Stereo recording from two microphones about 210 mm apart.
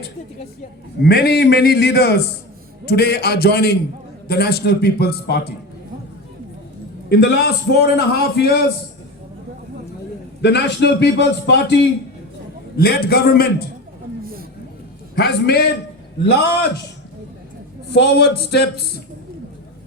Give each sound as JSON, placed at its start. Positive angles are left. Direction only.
{"t": 1.0, "sound": "a man's voice", "side_deg": 50}
{"t": 7.1, "sound": "a man's voice", "side_deg": 50}
{"t": 10.4, "sound": "a man's voice", "side_deg": 55}
{"t": 15.1, "sound": "a man's voice", "side_deg": 50}
{"t": 17.9, "sound": "a man's voice", "side_deg": 50}